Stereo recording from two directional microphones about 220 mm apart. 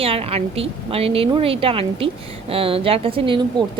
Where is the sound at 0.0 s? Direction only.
25° right (ahead or behind).